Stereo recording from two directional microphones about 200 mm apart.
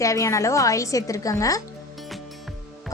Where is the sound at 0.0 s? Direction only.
15° left (ahead or behind).